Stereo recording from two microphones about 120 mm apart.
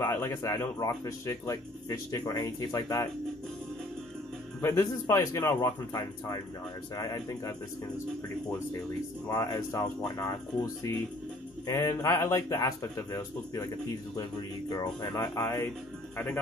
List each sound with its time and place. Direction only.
0.0 s speech: 20° left (ahead or behind)
4.6 s speech: 20° left (ahead or behind)
9.3 s speech: 25° left (ahead or behind)
14.7 s speech: 35° left (ahead or behind)